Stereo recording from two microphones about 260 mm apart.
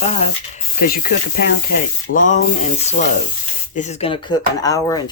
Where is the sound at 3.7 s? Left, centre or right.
Left.